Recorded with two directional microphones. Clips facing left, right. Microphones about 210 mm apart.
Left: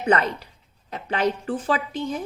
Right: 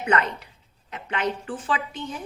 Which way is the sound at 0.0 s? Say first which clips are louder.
Left 3 dB; 35° left (ahead or behind).